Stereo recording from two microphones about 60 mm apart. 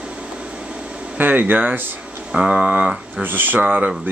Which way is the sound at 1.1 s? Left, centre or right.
Right.